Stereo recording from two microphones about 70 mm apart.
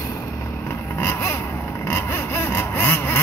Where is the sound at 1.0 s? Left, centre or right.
Left.